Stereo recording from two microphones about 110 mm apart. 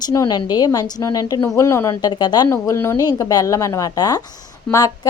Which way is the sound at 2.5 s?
25° left (ahead or behind).